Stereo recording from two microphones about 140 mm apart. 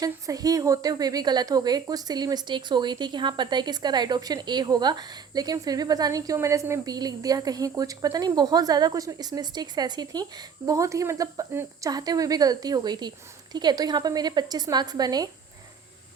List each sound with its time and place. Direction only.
0.0 s a woman's voice: 25° right (ahead or behind)